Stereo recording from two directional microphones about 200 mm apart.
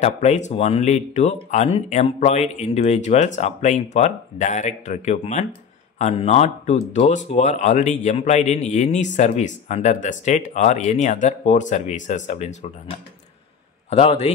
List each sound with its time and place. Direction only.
0.0 s speech: 35° left (ahead or behind)
13.8 s a man's voice: 30° left (ahead or behind)